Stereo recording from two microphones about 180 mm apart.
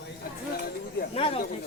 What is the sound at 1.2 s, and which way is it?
Speech, 30° left (ahead or behind).